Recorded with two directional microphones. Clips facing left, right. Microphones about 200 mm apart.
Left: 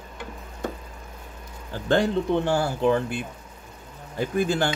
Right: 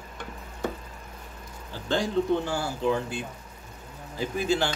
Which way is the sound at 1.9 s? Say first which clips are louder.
Left 3 dB; 65° left (ahead or behind).